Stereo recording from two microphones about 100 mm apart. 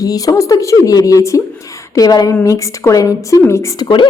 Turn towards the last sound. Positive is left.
turn(degrees=55)  # may be behind; listen again after turning